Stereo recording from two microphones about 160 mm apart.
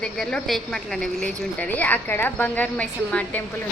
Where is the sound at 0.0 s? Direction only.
5° left (ahead or behind).